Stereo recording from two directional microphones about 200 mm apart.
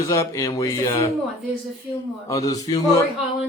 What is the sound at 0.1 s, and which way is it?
A man's voice, 15° left (ahead or behind).